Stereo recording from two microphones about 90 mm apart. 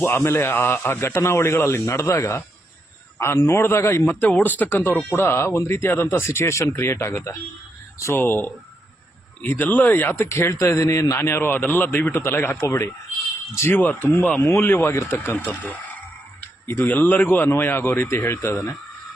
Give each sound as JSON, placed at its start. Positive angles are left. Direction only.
{"t": 0.0, "sound": "a man's voice", "side_deg": 30}
{"t": 13.6, "sound": "a man's voice", "side_deg": 20}
{"t": 16.6, "sound": "a man's voice", "side_deg": 25}